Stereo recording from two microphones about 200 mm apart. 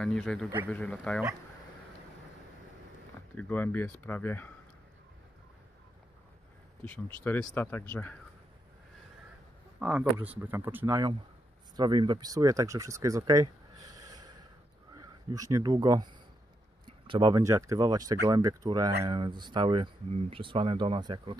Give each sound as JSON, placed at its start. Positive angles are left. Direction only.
{"t": 0.0, "sound": "speech", "side_deg": 5}
{"t": 3.3, "sound": "speech", "side_deg": 10}
{"t": 6.8, "sound": "speech", "side_deg": 10}
{"t": 9.8, "sound": "speech", "side_deg": -5}